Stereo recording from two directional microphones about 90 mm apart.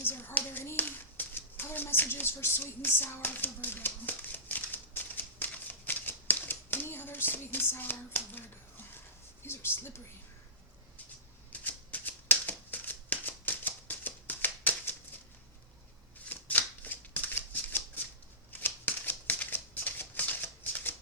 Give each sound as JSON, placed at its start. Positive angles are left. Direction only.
{"t": 0.0, "sound": "a sound", "side_deg": 25}
{"t": 9.4, "sound": "speech", "side_deg": 25}
{"t": 11.5, "sound": "shuffling cards", "side_deg": 15}
{"t": 16.3, "sound": "shuffling cards", "side_deg": 20}